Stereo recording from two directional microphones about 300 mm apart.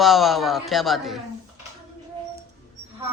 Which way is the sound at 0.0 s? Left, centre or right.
Centre.